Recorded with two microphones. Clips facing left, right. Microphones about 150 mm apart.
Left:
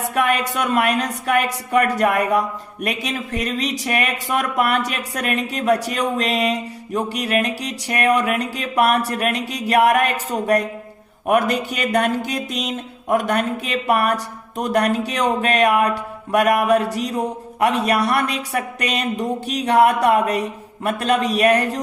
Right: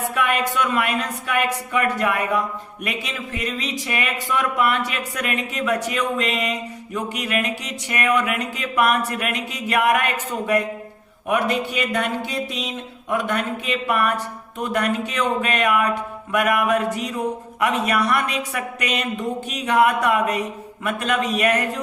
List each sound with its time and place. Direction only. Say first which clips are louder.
0.1 s speech: left 5 dB; 45° left (ahead or behind)